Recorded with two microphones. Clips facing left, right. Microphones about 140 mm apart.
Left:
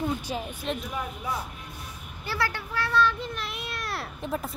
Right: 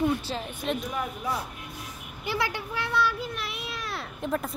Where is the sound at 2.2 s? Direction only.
15° right (ahead or behind).